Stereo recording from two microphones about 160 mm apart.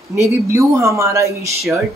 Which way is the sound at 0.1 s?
15° right (ahead or behind).